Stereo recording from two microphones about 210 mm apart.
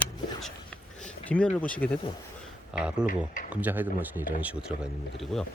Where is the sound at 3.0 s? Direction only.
40° left (ahead or behind).